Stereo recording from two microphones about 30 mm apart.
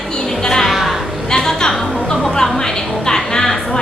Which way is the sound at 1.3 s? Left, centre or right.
Left.